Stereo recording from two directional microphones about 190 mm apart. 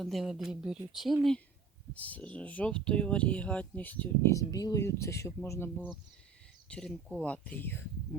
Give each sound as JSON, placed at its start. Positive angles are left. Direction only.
{"t": 0.0, "sound": "speech", "side_deg": 0}
{"t": 1.9, "sound": "speech", "side_deg": 10}